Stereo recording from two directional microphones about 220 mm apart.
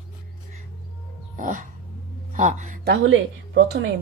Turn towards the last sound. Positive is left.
turn(degrees=-60)  # may be behind; listen again after turning